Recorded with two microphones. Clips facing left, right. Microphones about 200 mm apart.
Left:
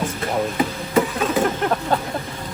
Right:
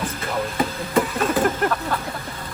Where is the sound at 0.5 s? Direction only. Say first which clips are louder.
Left 2 dB; centre (ahead or behind).